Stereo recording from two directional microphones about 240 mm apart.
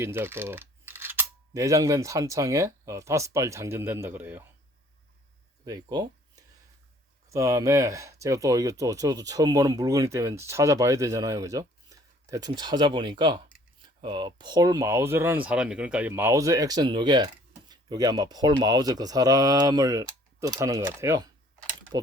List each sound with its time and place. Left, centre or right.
0.0 s speech: centre
5.6 s speech: centre
7.3 s speech: centre